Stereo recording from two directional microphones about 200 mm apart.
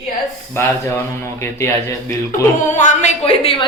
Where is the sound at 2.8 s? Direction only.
35° left (ahead or behind).